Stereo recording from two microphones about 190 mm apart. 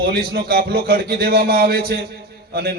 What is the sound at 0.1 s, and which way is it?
A man's voice, 55° right (ahead or behind).